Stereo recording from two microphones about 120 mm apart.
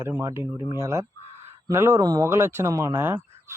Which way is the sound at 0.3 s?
25° right (ahead or behind).